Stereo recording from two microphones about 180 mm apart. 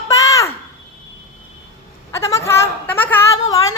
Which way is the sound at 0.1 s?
20° left (ahead or behind).